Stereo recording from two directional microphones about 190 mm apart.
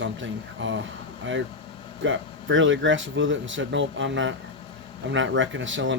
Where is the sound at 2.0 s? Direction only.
85° right.